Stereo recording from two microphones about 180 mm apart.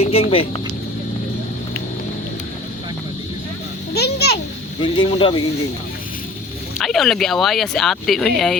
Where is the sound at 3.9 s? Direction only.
65° left (ahead or behind).